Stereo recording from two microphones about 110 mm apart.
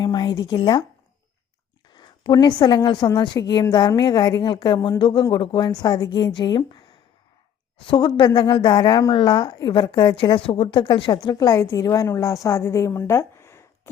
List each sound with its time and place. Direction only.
0.0 s speech: 40° left (ahead or behind)
1.9 s a woman's voice: 45° left (ahead or behind)
7.9 s a woman's voice: 45° left (ahead or behind); by 13.9 s 25° left (ahead or behind)